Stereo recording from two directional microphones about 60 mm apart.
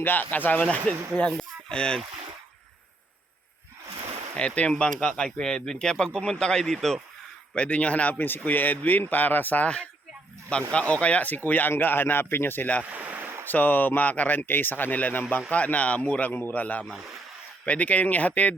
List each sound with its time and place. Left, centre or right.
0.0 s speech: left; by 2.0 s centre
4.4 s speech: centre
7.5 s speech: centre; by 12.7 s left
12.8 s a sound: right
13.4 s speech: left
16.8 s speech: centre
17.7 s speech: left